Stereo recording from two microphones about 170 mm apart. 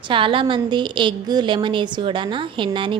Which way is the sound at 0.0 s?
30° right (ahead or behind).